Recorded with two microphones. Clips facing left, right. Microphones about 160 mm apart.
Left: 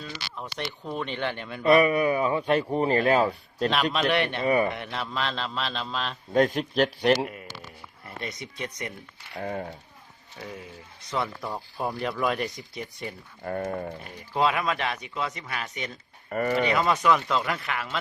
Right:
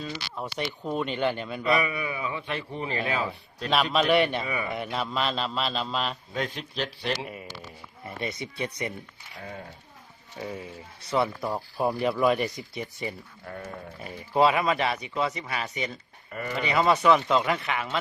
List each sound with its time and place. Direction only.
0.0 s speech: 10° right (ahead or behind)
1.6 s a man's voice: 45° left (ahead or behind)
3.9 s speech: 5° right (ahead or behind)
4.4 s a man's voice: 45° left (ahead or behind)
4.7 s speech: 5° right (ahead or behind)
6.3 s a man's voice: 45° left (ahead or behind)
8.2 s speech: 5° right (ahead or behind)
9.4 s speech: 55° left (ahead or behind)
11.1 s speech: 5° right (ahead or behind)
13.4 s speech: 55° left (ahead or behind)
14.0 s speech: 5° right (ahead or behind)
16.3 s a man's voice: 50° left (ahead or behind)
16.6 s speech: centre (ahead or behind)